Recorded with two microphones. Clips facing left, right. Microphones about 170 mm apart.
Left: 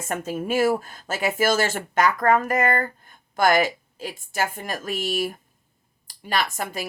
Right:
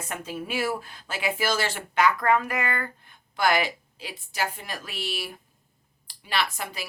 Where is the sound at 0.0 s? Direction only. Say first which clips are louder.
Left 6 dB; 45° left (ahead or behind).